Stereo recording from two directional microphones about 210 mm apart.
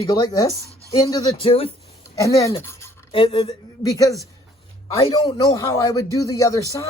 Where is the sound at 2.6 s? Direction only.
10° left (ahead or behind).